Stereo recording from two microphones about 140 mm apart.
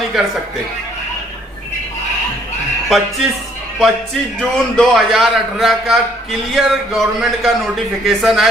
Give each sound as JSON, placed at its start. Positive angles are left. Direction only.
{"t": 2.9, "sound": "a man's voice", "side_deg": 0}